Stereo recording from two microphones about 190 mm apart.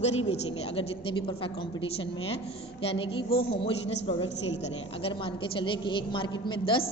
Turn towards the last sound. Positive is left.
turn(degrees=25)  # may be behind; listen again after turning